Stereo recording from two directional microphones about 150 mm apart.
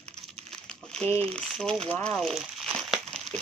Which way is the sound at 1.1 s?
5° left (ahead or behind).